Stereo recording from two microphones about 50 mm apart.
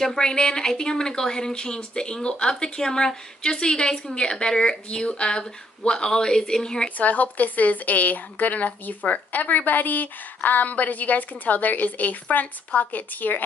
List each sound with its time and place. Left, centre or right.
0.0 s speech: centre
7.0 s speech: left